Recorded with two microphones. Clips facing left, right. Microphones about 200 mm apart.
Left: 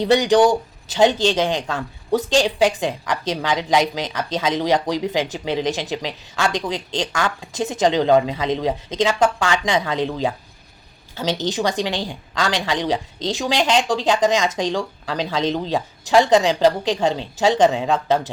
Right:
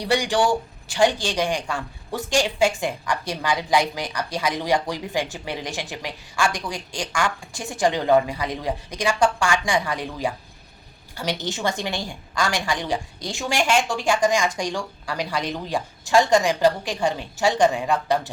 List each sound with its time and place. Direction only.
0.0 s a woman's voice: 20° left (ahead or behind)